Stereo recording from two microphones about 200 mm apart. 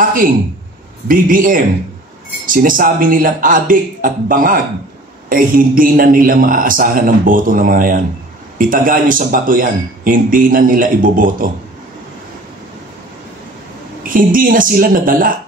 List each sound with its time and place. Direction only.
0.0 s a sound: 45° right (ahead or behind)
1.0 s speech: 45° right (ahead or behind)
14.0 s speech: 45° right (ahead or behind)